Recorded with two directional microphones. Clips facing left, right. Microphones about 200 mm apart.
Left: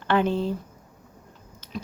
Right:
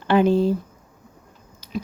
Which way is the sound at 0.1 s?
10° right (ahead or behind).